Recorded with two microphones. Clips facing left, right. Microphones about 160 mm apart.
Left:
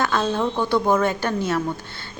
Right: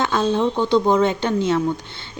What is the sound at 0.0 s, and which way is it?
Speech, 20° right (ahead or behind).